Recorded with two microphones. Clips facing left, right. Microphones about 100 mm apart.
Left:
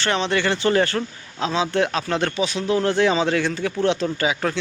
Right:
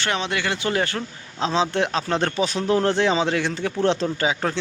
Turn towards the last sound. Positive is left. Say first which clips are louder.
# left 1 dB
turn(degrees=-20)  # may be behind; listen again after turning